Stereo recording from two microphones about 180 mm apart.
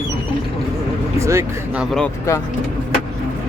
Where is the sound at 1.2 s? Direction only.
15° right (ahead or behind).